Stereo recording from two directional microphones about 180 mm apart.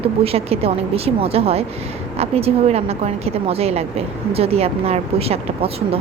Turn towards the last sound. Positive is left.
turn(degrees=-35)  # may be behind; listen again after turning